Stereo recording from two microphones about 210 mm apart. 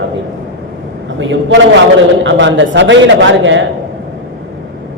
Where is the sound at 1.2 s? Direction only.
65° right (ahead or behind).